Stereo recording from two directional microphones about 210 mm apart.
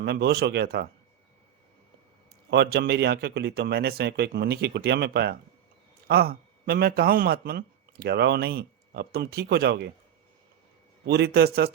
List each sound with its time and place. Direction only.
0.0 s speech: 50° right (ahead or behind)
2.5 s speech: 50° right (ahead or behind)
11.0 s speech: 50° right (ahead or behind)